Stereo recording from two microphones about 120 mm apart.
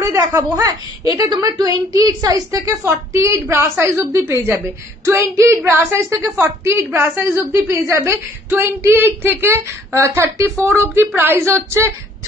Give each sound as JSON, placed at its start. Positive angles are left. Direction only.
{"t": 0.0, "sound": "a woman's voice", "side_deg": -25}